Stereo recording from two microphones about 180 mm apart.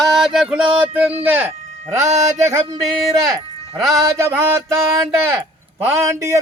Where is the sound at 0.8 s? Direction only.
10° right (ahead or behind).